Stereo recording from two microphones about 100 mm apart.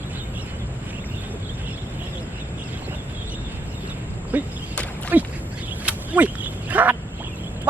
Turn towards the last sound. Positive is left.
turn(degrees=-15)  # may be behind; listen again after turning